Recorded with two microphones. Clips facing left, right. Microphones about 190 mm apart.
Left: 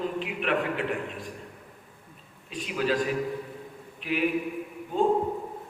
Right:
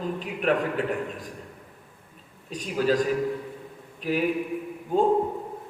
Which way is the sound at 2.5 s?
40° right (ahead or behind).